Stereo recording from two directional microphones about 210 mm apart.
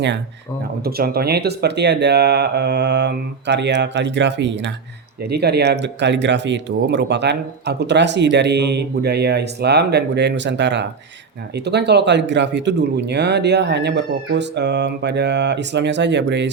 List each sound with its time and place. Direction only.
0.9 s speech: 45° right (ahead or behind)